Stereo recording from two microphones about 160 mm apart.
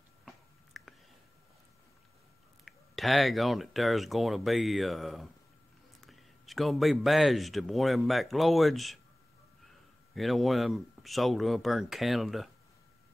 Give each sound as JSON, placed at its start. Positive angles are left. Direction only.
{"t": 0.7, "sound": "a sound", "side_deg": 0}
{"t": 2.6, "sound": "speech", "side_deg": 0}
{"t": 10.1, "sound": "speech", "side_deg": 0}